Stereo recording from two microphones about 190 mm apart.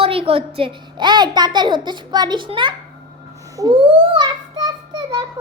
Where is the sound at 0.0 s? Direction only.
30° right (ahead or behind).